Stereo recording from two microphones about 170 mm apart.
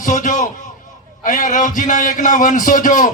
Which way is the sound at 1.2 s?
45° left (ahead or behind).